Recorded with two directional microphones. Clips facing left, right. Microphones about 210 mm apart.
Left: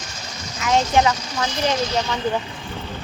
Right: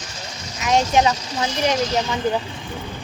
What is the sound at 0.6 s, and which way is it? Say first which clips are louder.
Speech: even; 20° right (ahead or behind).